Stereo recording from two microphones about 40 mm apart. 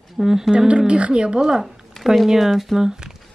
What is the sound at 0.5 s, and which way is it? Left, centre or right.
Speech, right.